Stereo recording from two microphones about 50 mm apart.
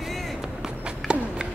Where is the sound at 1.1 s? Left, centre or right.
Centre.